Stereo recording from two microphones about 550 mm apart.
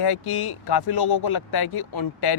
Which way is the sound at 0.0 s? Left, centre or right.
Left.